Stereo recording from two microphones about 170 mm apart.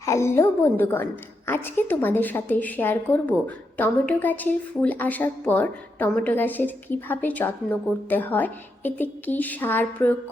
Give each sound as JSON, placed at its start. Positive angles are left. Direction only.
{"t": 0.0, "sound": "a woman's voice", "side_deg": 15}